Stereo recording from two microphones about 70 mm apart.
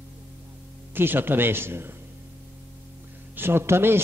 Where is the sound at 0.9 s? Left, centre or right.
Right.